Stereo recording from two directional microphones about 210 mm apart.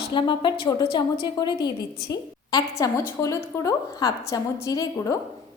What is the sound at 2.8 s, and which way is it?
A woman's voice, 15° left (ahead or behind).